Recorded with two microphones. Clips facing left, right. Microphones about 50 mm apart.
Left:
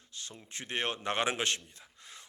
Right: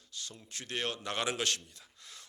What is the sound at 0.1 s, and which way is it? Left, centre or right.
A man's voice, left.